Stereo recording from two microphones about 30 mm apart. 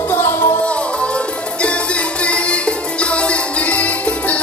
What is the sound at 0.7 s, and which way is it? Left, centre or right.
Music, left.